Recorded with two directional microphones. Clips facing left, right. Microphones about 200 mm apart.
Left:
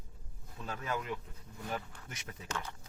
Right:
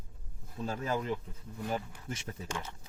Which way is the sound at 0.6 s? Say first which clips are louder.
Right 5 dB; 30° right (ahead or behind).